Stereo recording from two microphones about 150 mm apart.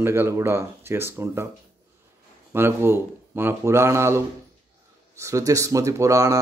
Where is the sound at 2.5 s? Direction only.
15° right (ahead or behind).